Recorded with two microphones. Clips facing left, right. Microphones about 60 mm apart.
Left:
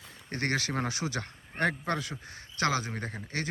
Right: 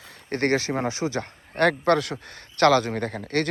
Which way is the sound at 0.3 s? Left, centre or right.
Right.